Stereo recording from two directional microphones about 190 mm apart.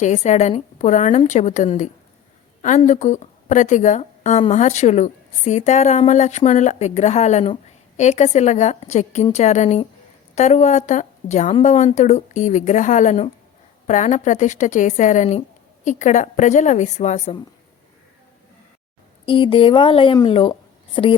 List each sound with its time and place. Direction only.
0.0 s a woman's voice: 40° left (ahead or behind)
19.2 s a woman's voice: 25° left (ahead or behind)